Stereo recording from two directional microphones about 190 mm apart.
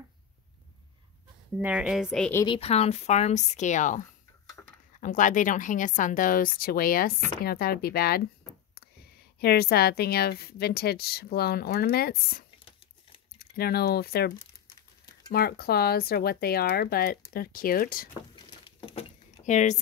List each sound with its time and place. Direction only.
1.6 s a woman's voice: 5° right (ahead or behind)
2.4 s speech: 30° left (ahead or behind)
5.0 s a woman's voice: 45° left (ahead or behind)
9.4 s a woman's voice: 55° left (ahead or behind)
18.3 s crumpling: 25° left (ahead or behind)
19.4 s speech: 40° left (ahead or behind)